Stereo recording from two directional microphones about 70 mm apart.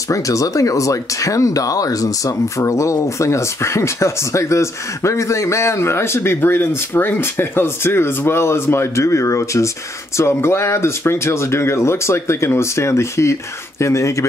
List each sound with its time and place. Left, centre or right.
0.1 s speech: left